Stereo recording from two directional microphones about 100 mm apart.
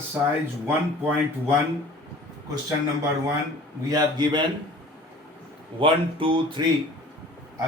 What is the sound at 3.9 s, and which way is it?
Speech, 45° right (ahead or behind).